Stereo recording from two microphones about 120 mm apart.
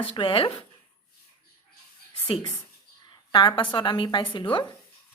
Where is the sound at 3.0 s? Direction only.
35° left (ahead or behind).